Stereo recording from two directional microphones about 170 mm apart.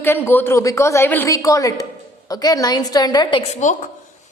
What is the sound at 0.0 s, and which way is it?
A woman's voice, 10° left (ahead or behind).